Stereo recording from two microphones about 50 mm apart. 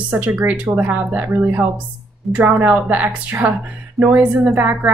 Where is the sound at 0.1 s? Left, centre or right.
Right.